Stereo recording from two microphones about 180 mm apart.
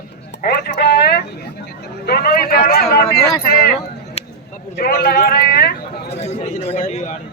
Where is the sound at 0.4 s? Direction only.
65° left (ahead or behind).